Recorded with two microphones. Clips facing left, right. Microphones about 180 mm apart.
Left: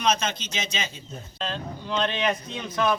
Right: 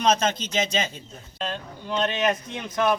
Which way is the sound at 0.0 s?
45° right (ahead or behind).